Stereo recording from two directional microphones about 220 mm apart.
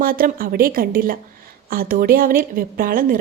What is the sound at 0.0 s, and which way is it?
A woman's voice, 40° right (ahead or behind).